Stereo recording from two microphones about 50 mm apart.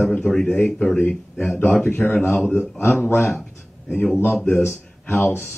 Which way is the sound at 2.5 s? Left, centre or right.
Left.